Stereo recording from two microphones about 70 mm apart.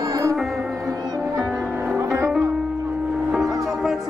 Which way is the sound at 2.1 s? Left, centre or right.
Right.